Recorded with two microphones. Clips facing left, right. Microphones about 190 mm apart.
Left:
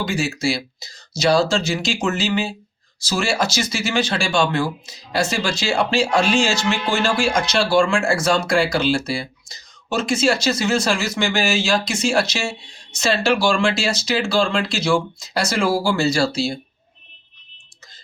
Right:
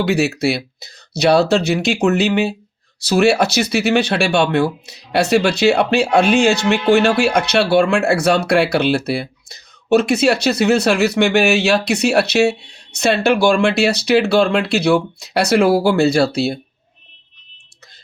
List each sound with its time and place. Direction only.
0.0 s speech: 65° right (ahead or behind)